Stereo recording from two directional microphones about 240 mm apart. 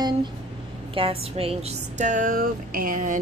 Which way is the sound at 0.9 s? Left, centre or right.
Right.